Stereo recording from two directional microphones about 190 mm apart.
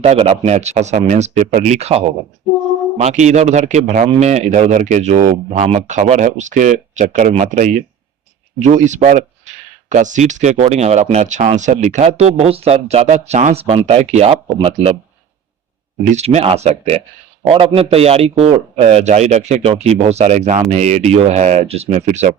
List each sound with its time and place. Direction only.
0.0 s speech: 30° right (ahead or behind)
16.1 s speech: 35° right (ahead or behind)